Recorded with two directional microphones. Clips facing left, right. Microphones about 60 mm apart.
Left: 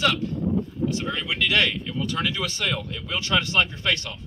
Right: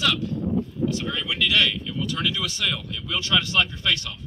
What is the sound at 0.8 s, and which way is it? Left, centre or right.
Speech, left.